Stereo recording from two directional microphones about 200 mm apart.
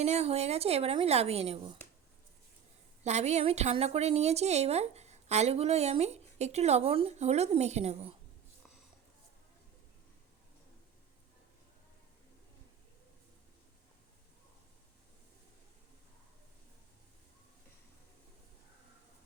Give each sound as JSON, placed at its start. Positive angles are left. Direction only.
{"t": 0.0, "sound": "a woman's voice", "side_deg": -35}
{"t": 3.0, "sound": "a woman's voice", "side_deg": -35}